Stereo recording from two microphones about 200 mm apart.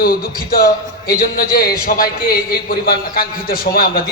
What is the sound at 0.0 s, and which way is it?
A man's voice, 45° left (ahead or behind).